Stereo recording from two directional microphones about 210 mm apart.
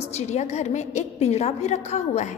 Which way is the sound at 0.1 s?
30° left (ahead or behind).